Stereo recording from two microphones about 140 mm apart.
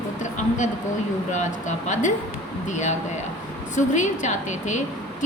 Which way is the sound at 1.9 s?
60° left (ahead or behind).